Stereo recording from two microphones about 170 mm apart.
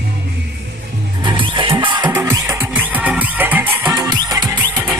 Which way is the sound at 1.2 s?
30° right (ahead or behind).